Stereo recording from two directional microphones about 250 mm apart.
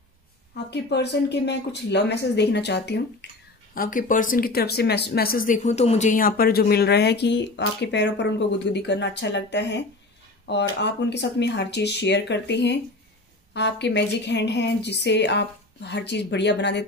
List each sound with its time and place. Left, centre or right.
0.7 s a woman's voice: left